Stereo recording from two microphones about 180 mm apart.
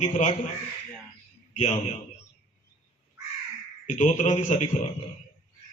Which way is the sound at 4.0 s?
45° left (ahead or behind).